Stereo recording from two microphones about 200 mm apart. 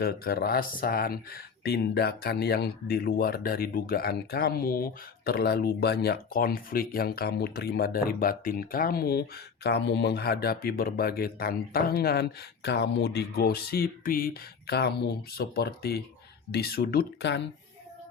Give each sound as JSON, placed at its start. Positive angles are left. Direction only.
{"t": 0.0, "sound": "speech", "side_deg": 50}